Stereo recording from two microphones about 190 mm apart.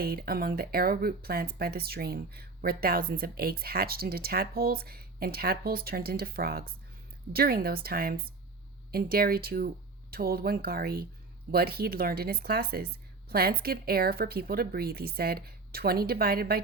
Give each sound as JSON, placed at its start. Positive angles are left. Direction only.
{"t": 0.0, "sound": "speech", "side_deg": -50}